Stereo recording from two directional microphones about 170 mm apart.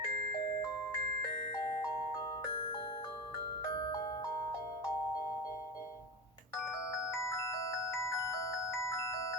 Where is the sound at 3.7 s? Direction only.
25° left (ahead or behind).